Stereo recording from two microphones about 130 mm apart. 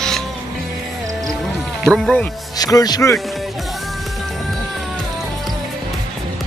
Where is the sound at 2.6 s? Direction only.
30° left (ahead or behind).